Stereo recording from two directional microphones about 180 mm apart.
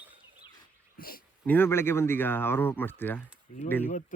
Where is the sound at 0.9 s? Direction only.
55° left (ahead or behind).